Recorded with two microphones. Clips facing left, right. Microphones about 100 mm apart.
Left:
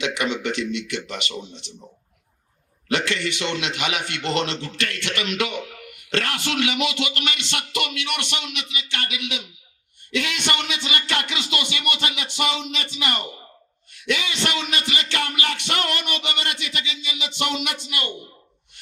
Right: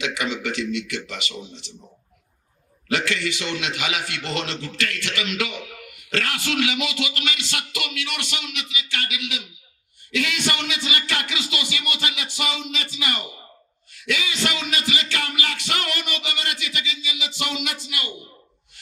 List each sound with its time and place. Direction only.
0.0 s music: 25° left (ahead or behind)
2.9 s music: 25° left (ahead or behind)